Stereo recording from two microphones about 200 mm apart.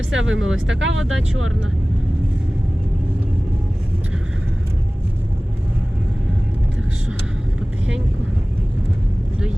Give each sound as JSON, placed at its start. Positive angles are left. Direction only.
{"t": 0.1, "sound": "speech", "side_deg": -75}